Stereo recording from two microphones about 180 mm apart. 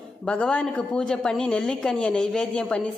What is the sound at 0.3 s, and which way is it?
A woman's voice, 5° left (ahead or behind).